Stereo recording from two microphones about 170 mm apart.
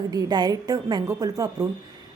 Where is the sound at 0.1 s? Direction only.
25° right (ahead or behind).